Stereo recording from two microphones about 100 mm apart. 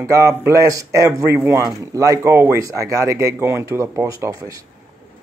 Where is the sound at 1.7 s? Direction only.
35° right (ahead or behind).